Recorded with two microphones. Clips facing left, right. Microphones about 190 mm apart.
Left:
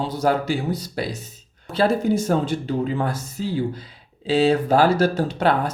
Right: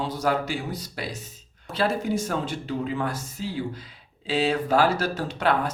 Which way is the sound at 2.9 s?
40° left (ahead or behind).